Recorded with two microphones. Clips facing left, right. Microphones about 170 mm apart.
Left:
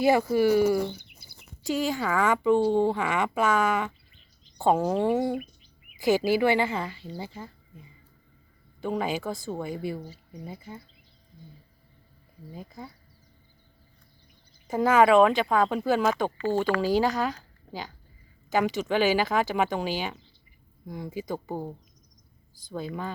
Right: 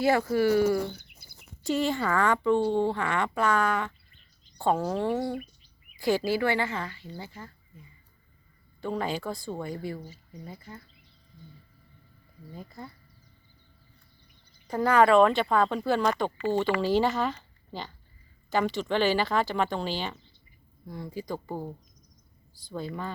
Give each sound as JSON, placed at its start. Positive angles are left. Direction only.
{"t": 0.0, "sound": "speech", "side_deg": 15}
{"t": 1.6, "sound": "speech", "side_deg": 0}
{"t": 12.6, "sound": "speech", "side_deg": 0}
{"t": 14.8, "sound": "speech", "side_deg": 5}
{"t": 17.2, "sound": "a sound", "side_deg": 10}
{"t": 18.5, "sound": "speech", "side_deg": 5}